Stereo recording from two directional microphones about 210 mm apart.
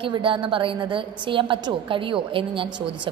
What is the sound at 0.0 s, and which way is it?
A woman's voice, 25° right (ahead or behind).